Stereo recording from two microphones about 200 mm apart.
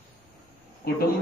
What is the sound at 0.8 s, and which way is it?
Speech, 50° left (ahead or behind).